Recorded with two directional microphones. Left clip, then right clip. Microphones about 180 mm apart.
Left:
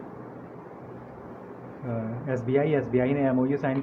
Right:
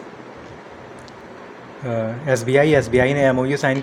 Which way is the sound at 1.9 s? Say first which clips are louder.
Right 11 dB; 40° right (ahead or behind).